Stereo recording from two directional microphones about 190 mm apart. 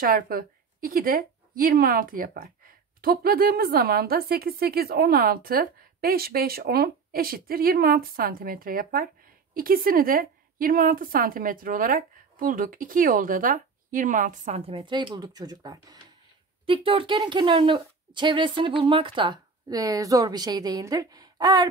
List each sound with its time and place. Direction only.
0.0 s a woman's voice: 50° right (ahead or behind); by 21.6 s 20° right (ahead or behind)